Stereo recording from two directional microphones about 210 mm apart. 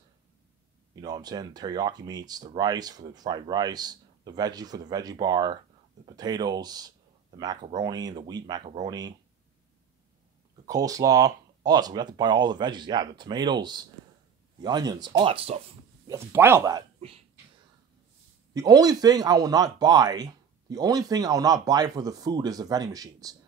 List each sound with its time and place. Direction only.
1.0 s speech: 20° right (ahead or behind)
10.7 s speech: 15° right (ahead or behind)
16.1 s speech: 10° right (ahead or behind)
18.5 s speech: 15° right (ahead or behind)